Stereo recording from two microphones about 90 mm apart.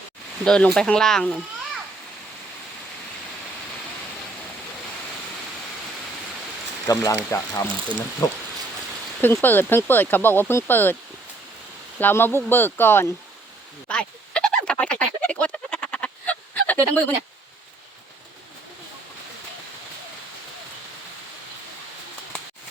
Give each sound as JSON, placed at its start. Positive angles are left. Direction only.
{"t": 0.4, "sound": "speech", "side_deg": 10}
{"t": 7.0, "sound": "speech", "side_deg": 30}
{"t": 8.2, "sound": "speech", "side_deg": 45}
{"t": 9.2, "sound": "speech", "side_deg": 20}
{"t": 11.9, "sound": "speech", "side_deg": 20}
{"t": 13.8, "sound": "frog", "side_deg": 10}